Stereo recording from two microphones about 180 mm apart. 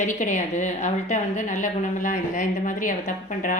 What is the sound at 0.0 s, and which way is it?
A woman's voice, 40° left (ahead or behind).